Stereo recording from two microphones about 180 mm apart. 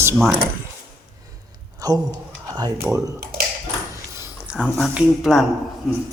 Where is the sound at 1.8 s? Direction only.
20° right (ahead or behind).